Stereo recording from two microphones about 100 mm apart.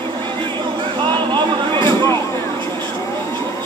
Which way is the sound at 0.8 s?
50° right (ahead or behind).